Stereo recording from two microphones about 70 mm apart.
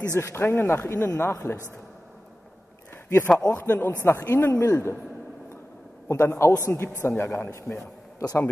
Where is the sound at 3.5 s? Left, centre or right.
Left.